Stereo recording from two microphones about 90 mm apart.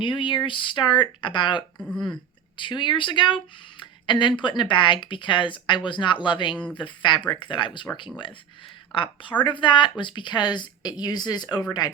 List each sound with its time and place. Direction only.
0.0 s speech: 65° left (ahead or behind)
1.8 s speech: 5° left (ahead or behind)
2.6 s speech: 60° left (ahead or behind)
8.9 s speech: 70° left (ahead or behind); by 12.0 s 50° left (ahead or behind)